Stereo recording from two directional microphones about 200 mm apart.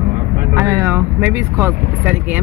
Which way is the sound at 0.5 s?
15° right (ahead or behind).